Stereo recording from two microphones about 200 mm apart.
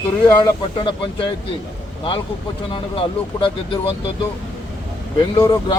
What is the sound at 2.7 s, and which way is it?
Speech, 25° left (ahead or behind).